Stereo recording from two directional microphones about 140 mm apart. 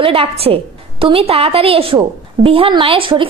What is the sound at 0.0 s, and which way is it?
A woman's voice, 40° right (ahead or behind).